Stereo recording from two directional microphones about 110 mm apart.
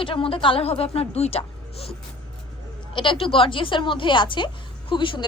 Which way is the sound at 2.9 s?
50° left (ahead or behind).